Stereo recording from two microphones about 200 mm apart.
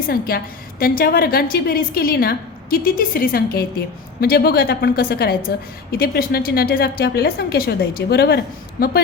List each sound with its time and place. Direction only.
0.1 s a woman's voice: 50° left (ahead or behind)